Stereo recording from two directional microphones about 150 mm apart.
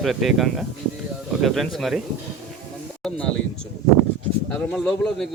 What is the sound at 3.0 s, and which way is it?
Speech, 5° left (ahead or behind).